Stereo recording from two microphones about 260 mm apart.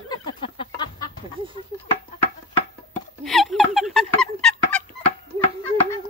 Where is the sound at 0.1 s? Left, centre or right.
Centre.